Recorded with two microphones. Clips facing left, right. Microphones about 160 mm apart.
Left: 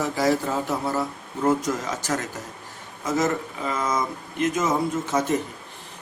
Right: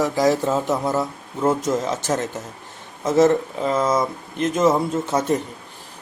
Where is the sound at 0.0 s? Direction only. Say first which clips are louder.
Right 4 dB; 15° right (ahead or behind).